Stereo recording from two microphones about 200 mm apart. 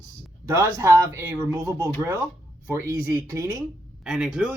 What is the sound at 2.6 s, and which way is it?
Speech, 15° right (ahead or behind).